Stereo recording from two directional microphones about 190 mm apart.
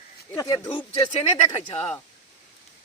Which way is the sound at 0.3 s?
20° left (ahead or behind).